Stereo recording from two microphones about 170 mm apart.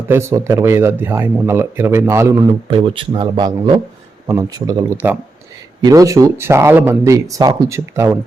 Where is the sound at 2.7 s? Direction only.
30° right (ahead or behind).